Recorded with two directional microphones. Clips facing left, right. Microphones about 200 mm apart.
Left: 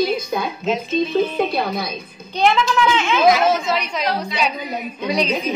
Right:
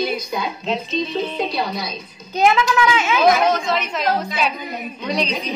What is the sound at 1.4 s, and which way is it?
Speech, 55° left (ahead or behind).